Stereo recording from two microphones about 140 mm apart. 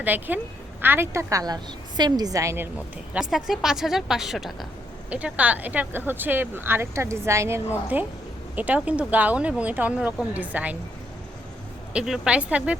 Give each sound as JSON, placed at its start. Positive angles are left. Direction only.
{"t": 0.0, "sound": "a woman's voice", "side_deg": -15}
{"t": 3.1, "sound": "a woman's voice", "side_deg": -5}
{"t": 11.9, "sound": "speech", "side_deg": -5}